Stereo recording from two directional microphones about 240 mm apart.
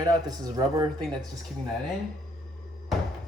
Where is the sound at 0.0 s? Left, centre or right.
Centre.